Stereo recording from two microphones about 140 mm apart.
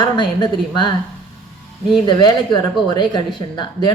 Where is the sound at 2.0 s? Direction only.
30° left (ahead or behind).